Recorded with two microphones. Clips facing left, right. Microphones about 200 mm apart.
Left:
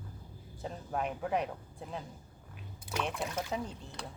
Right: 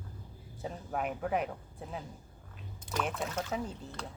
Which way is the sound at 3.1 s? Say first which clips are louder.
Even; 10° left (ahead or behind).